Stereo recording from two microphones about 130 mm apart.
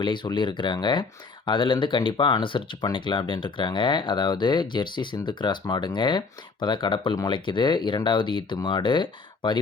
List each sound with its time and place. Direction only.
0.0 s speech: 35° left (ahead or behind)